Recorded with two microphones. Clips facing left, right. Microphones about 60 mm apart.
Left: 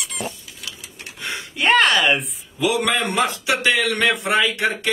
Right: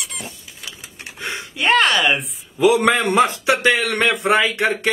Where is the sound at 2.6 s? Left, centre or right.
Right.